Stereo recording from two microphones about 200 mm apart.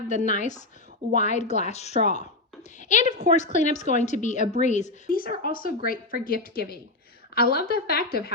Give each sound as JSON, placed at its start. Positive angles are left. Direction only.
{"t": 0.1, "sound": "a woman's voice", "side_deg": 40}